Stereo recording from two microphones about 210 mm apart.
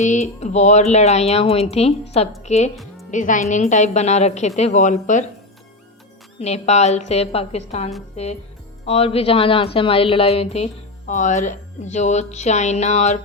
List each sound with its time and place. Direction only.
0.0 s a woman's voice: 35° left (ahead or behind)
6.4 s a woman's voice: 30° left (ahead or behind)